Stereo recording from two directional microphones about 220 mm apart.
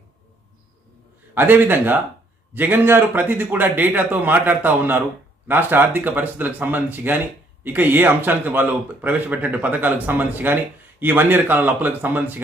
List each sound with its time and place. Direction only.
1.3 s speech: 10° right (ahead or behind)